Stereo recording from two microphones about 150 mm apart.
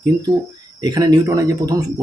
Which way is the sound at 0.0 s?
30° right (ahead or behind).